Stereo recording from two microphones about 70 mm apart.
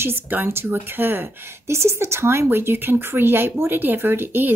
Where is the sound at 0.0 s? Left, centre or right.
Right.